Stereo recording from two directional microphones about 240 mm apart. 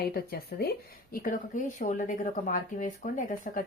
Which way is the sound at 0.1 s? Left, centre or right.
Left.